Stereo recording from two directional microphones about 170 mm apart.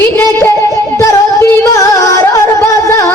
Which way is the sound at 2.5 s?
15° left (ahead or behind).